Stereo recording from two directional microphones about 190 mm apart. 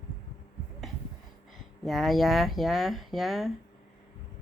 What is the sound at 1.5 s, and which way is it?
Speech, centre (ahead or behind).